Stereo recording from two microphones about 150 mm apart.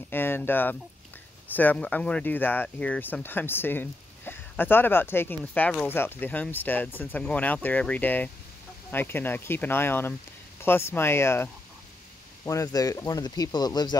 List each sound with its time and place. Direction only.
0.1 s speech: 15° left (ahead or behind)